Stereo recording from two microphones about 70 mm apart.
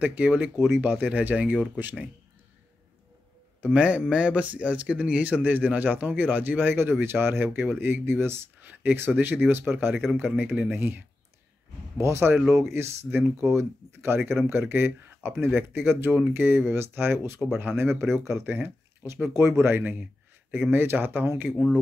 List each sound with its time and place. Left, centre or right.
0.0 s a man's voice: right
3.6 s a man's voice: centre; by 19.8 s right
19.8 s a man's voice: right